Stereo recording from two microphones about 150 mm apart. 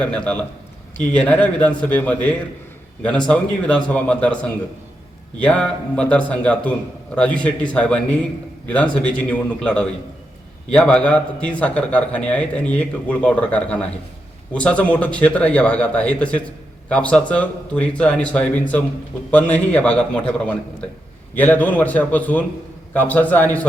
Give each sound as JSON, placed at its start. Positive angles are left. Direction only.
{"t": 0.0, "sound": "a man's voice", "side_deg": 10}
{"t": 5.4, "sound": "a man's voice", "side_deg": 10}